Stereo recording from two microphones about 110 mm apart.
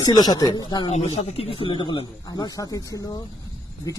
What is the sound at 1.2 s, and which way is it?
Speech, 65° left (ahead or behind).